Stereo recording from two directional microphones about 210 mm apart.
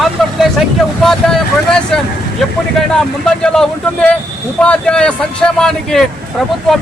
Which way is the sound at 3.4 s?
5° left (ahead or behind).